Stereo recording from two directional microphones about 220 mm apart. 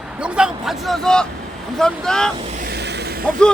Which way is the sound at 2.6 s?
45° right (ahead or behind).